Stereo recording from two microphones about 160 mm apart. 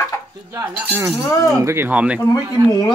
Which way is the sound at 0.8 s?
15° right (ahead or behind).